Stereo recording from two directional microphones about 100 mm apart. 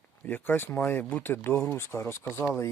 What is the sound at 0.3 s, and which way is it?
Speech, 20° left (ahead or behind).